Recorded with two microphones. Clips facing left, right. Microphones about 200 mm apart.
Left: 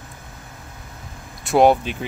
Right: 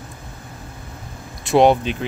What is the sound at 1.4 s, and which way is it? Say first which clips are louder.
Speech: right 1 dB; 5° left (ahead or behind).